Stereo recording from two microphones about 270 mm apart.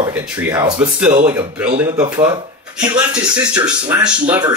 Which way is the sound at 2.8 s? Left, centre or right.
Centre.